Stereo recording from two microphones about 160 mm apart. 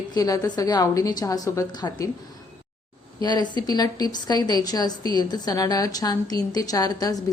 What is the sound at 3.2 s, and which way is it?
A woman's voice, 25° left (ahead or behind).